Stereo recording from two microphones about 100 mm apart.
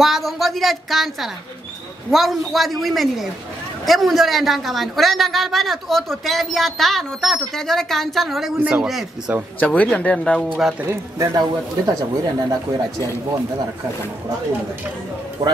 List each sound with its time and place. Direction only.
0.0 s a woman's voice: centre (ahead or behind)
8.5 s speech: 15° right (ahead or behind)
9.6 s speech: 15° left (ahead or behind)
10.9 s speech: 35° right (ahead or behind)
15.4 s speech: 45° right (ahead or behind)